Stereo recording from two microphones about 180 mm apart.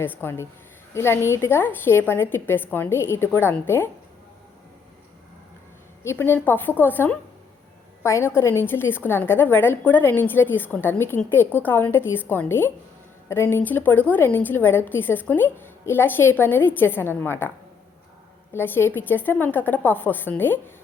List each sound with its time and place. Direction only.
0.0 s a woman's voice: 10° left (ahead or behind)
6.0 s a woman's voice: 15° left (ahead or behind)
18.5 s a woman's voice: 10° left (ahead or behind)